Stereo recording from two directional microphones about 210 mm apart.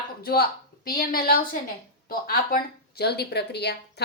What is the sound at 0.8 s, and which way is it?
A woman's voice, 45° left (ahead or behind).